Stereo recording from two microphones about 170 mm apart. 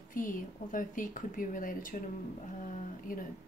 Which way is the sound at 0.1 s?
50° left (ahead or behind).